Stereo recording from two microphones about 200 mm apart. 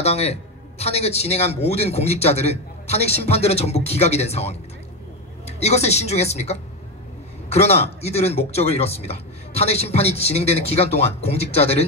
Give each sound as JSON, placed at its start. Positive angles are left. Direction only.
{"t": 0.0, "sound": "a man's voice", "side_deg": 30}